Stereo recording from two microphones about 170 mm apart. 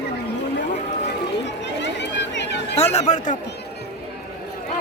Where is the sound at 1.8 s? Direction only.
90° left.